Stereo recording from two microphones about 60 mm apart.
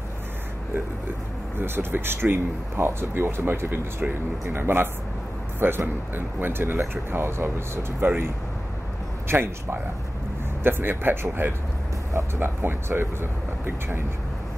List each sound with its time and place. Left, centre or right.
1.6 s speech: right
9.3 s a man's voice: right